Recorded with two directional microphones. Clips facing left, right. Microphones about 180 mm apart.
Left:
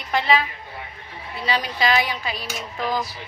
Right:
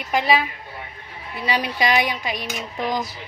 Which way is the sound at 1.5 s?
15° right (ahead or behind).